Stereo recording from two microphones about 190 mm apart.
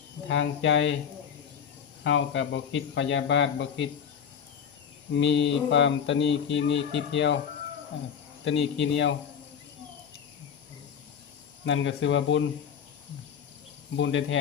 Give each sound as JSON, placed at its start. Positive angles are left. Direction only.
{"t": 0.3, "sound": "speech", "side_deg": 80}
{"t": 2.0, "sound": "speech", "side_deg": 75}
{"t": 5.1, "sound": "speech", "side_deg": 70}
{"t": 8.4, "sound": "speech", "side_deg": 75}
{"t": 11.6, "sound": "speech", "side_deg": 80}
{"t": 13.9, "sound": "speech", "side_deg": 80}